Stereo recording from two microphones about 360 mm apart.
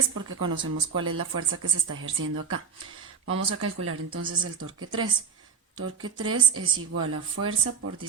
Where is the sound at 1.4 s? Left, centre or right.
Right.